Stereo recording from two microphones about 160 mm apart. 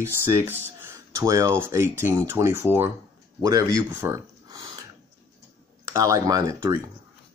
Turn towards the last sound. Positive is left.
turn(degrees=-20)  # may be behind; listen again after turning